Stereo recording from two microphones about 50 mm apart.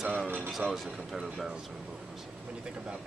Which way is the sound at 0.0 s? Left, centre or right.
Centre.